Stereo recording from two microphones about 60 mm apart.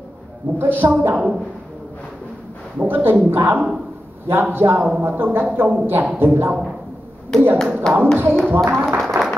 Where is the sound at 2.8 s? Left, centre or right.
Right.